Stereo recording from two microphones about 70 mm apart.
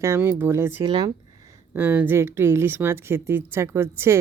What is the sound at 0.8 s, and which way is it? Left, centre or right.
Speech, right.